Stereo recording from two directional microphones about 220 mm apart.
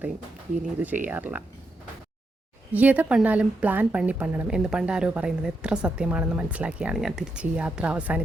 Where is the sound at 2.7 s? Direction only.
5° right (ahead or behind).